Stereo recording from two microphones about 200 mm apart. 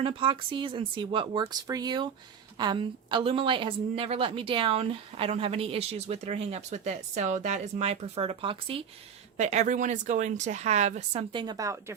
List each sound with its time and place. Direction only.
0.0 s a woman's voice: 25° right (ahead or behind)